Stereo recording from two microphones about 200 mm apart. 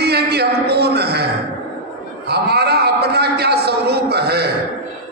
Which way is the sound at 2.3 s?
55° right (ahead or behind).